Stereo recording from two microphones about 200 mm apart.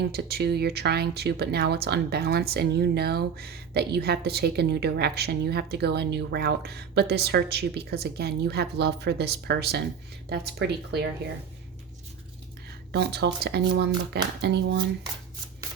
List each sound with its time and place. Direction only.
0.0 s speech: 55° right (ahead or behind)
12.9 s speech: 55° right (ahead or behind)